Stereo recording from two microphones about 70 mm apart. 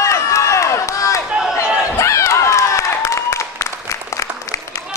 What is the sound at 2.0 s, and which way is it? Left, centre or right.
Applause, left.